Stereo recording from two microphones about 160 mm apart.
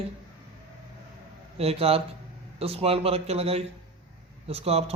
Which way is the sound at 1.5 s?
40° right (ahead or behind).